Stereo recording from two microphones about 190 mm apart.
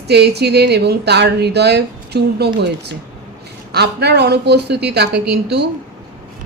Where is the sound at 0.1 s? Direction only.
60° right (ahead or behind).